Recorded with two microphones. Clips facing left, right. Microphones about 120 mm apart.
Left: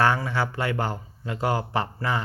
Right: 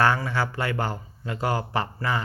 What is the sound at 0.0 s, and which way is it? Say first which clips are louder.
Speech: even; 20° left (ahead or behind).